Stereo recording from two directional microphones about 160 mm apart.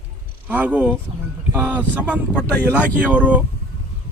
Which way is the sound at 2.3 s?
10° left (ahead or behind).